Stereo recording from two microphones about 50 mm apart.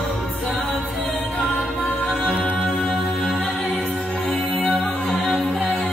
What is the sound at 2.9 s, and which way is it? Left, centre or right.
Music, centre.